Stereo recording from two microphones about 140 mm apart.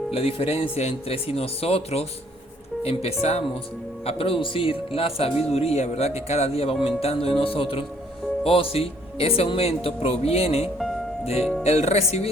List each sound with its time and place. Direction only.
0.1 s speech: 40° left (ahead or behind)